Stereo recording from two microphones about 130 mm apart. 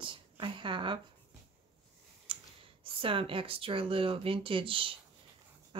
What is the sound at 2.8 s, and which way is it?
A woman's voice, 45° right (ahead or behind).